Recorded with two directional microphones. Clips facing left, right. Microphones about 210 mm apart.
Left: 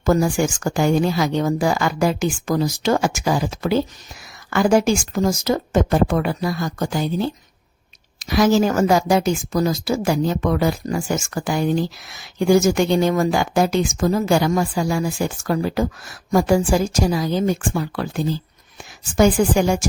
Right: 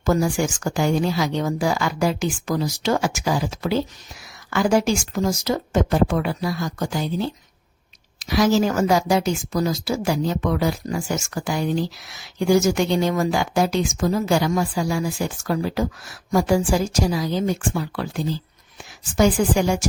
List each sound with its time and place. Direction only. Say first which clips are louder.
0.0 s speech: left 3 dB; 50° left (ahead or behind)